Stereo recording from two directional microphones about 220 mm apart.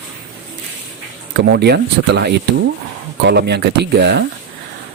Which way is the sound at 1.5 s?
50° right (ahead or behind).